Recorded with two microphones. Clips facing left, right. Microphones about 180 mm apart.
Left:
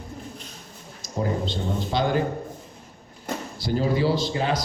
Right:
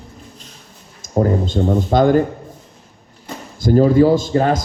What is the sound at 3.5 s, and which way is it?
A man's voice, 45° right (ahead or behind).